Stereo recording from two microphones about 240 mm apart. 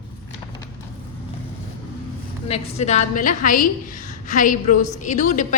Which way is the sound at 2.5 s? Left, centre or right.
Left.